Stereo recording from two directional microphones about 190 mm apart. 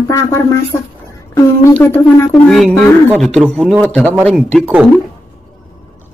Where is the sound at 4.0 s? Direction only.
10° right (ahead or behind).